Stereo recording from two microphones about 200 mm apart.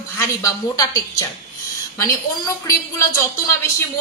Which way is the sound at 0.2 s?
15° left (ahead or behind).